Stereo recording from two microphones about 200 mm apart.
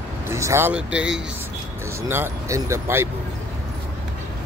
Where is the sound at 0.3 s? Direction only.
15° right (ahead or behind).